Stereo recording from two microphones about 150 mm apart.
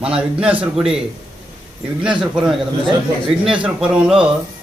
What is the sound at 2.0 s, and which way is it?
A man's voice, 5° right (ahead or behind).